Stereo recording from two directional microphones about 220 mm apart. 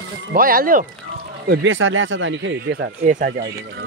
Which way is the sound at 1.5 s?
55° right (ahead or behind).